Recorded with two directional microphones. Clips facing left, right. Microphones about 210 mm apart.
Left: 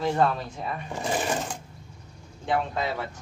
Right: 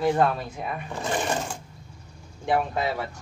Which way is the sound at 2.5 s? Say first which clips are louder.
Right 2 dB; 15° right (ahead or behind).